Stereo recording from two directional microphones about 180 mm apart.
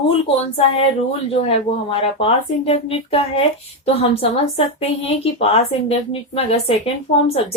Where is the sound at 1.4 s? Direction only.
35° left (ahead or behind).